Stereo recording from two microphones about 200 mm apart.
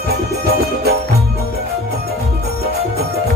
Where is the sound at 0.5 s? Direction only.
55° right (ahead or behind).